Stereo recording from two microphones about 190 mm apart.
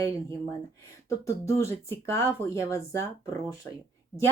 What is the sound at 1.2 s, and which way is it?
A woman's voice, 15° left (ahead or behind).